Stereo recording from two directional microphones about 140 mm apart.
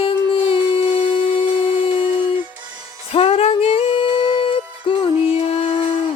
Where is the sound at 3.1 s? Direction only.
45° left (ahead or behind).